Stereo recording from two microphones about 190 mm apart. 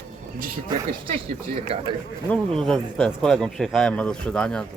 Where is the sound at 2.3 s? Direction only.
5° left (ahead or behind).